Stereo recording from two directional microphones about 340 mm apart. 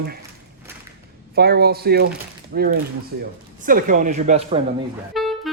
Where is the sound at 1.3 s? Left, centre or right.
Right.